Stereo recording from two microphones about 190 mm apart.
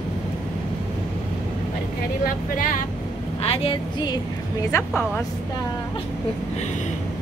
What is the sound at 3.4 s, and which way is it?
Speech, 30° left (ahead or behind).